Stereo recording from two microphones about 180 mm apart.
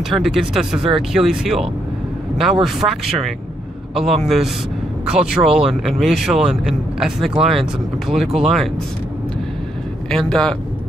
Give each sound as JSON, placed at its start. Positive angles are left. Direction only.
{"t": 0.1, "sound": "speech", "side_deg": 0}
{"t": 10.1, "sound": "speech", "side_deg": 5}